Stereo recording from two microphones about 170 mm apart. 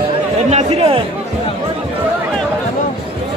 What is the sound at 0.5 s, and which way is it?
Speech, 35° right (ahead or behind).